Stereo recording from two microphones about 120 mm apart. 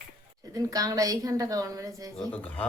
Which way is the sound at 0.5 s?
30° right (ahead or behind).